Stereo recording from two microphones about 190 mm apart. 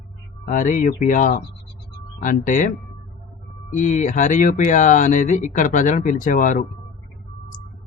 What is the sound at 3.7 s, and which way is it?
Speech, 40° left (ahead or behind).